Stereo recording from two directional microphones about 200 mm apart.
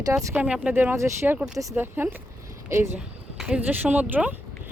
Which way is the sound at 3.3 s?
5° right (ahead or behind).